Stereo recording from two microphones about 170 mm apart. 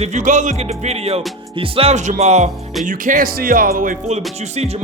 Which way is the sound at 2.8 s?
50° right (ahead or behind).